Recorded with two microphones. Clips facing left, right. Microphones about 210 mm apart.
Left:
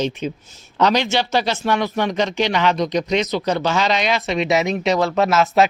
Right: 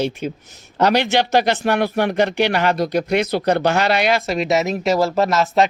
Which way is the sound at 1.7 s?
55° right (ahead or behind).